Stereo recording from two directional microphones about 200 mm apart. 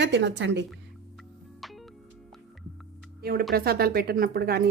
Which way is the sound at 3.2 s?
50° right (ahead or behind).